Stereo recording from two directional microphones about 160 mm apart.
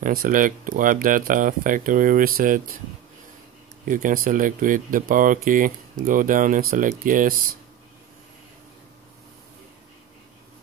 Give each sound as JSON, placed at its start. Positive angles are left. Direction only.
{"t": 0.0, "sound": "speech", "side_deg": -55}
{"t": 3.8, "sound": "speech", "side_deg": -55}